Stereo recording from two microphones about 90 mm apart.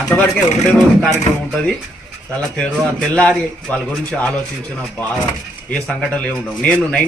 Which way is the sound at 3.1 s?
10° left (ahead or behind).